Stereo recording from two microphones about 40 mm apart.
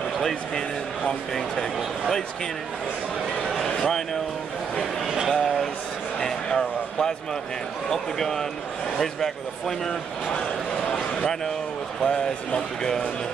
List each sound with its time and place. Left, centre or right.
0.2 s speech: centre
3.6 s speech: centre
5.0 s a sound: centre
5.3 s a sound: centre
7.9 s speech: centre
12.0 s a man's voice: left